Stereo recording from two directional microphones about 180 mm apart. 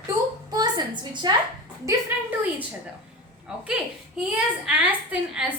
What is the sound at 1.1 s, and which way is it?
Speech, 25° right (ahead or behind).